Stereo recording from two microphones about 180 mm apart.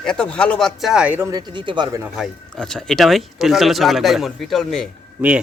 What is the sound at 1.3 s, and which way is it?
Speech, 25° right (ahead or behind).